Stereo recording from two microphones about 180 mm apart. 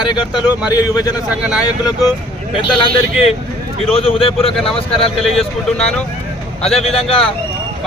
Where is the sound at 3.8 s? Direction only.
30° left (ahead or behind).